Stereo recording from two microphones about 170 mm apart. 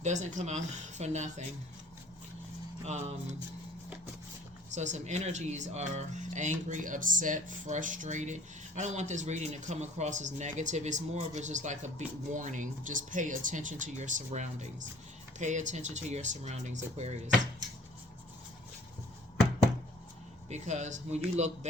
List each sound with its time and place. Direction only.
0.0 s speech: 45° right (ahead or behind)
2.8 s speech: 40° right (ahead or behind)
4.7 s speech: 45° right (ahead or behind)
20.5 s speech: 45° right (ahead or behind)